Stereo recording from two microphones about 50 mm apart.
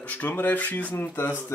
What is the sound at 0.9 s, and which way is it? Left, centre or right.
Speech, left.